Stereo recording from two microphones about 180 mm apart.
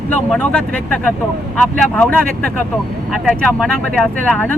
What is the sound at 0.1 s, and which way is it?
Speech, 5° left (ahead or behind).